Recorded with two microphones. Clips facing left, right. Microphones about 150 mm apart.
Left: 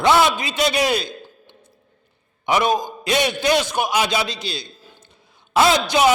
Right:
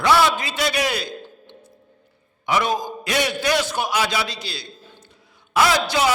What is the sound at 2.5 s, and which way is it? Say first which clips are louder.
A man's voice: left 3 dB; 20° left (ahead or behind).